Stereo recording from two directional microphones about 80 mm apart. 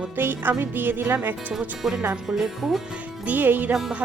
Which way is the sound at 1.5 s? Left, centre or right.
Centre.